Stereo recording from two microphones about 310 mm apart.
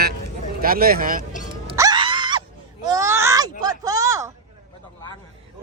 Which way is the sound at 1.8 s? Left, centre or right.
Centre.